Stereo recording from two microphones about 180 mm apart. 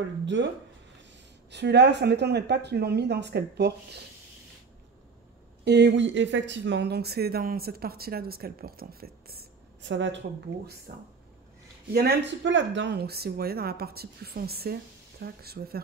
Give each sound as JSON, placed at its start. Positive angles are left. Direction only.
{"t": 0.2, "sound": "speech", "side_deg": -90}
{"t": 1.5, "sound": "speech", "side_deg": -70}
{"t": 5.7, "sound": "speech", "side_deg": -75}
{"t": 10.9, "sound": "speech", "side_deg": -55}
{"t": 11.9, "sound": "speech", "side_deg": -65}